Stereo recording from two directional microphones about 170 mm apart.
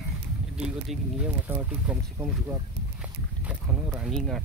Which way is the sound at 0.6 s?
5° right (ahead or behind).